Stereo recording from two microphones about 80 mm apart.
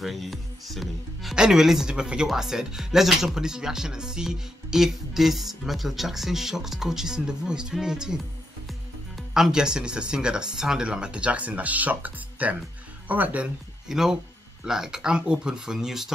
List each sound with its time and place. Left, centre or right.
0.0 s speech: centre
13.8 s speech: centre